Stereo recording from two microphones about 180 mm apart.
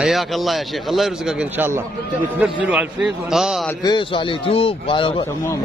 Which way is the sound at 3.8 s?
25° left (ahead or behind).